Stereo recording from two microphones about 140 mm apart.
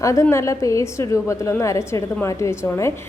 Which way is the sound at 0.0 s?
20° left (ahead or behind).